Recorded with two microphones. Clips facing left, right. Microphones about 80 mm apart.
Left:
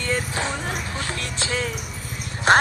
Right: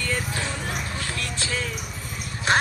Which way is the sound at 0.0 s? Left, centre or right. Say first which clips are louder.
Left 3 dB; left.